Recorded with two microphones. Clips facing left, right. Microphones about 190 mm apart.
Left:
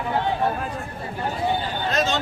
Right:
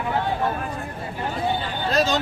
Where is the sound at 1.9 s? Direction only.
35° right (ahead or behind).